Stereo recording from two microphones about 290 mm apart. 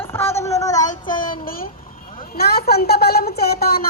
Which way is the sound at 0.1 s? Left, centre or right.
Centre.